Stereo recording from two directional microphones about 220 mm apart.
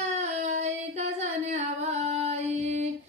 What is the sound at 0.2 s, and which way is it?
Singing, 30° right (ahead or behind).